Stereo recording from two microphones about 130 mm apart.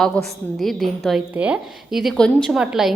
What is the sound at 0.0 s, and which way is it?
A woman's voice, centre (ahead or behind).